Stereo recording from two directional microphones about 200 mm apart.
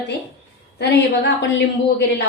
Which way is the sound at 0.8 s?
60° left (ahead or behind).